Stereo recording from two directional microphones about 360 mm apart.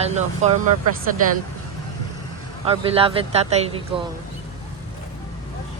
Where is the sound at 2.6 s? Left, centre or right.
Centre.